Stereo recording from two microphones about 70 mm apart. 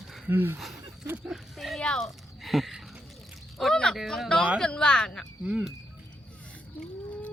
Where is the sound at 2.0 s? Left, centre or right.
Centre.